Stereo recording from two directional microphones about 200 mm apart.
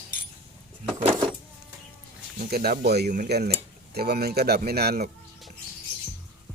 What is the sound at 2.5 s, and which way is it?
Speech, 50° right (ahead or behind).